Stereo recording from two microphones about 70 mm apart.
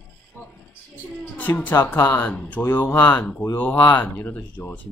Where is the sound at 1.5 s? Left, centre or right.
Left.